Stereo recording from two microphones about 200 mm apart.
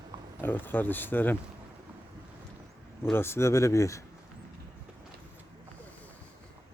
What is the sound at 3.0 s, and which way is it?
Speech, 10° left (ahead or behind).